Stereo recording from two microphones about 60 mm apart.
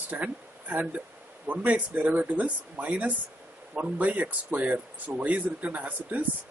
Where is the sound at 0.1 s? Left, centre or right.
Right.